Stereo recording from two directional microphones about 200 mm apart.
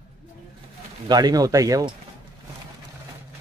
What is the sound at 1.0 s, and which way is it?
Speech, 20° right (ahead or behind).